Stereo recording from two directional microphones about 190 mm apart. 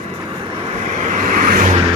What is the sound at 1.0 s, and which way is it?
Vehicle, 45° right (ahead or behind).